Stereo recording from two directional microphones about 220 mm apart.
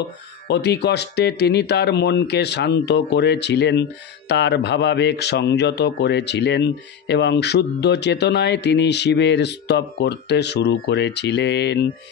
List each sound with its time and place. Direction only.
0.5 s speech: 50° left (ahead or behind)